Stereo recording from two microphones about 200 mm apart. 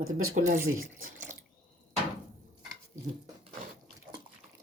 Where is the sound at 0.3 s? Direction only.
40° right (ahead or behind).